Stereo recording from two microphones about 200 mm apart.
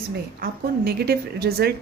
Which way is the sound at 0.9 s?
50° right (ahead or behind).